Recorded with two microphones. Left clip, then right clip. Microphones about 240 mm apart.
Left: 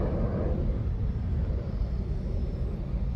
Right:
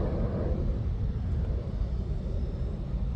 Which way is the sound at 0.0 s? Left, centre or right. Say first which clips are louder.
Left 1 dB; left.